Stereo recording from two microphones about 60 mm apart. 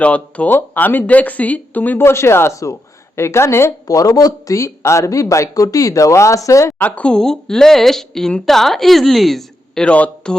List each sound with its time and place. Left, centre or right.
0.0 s speech: left
0.5 s speech: left
2.0 s speech: left
3.8 s speech: left
6.7 s speech: left
7.1 s a woman's voice: centre
9.8 s speech: centre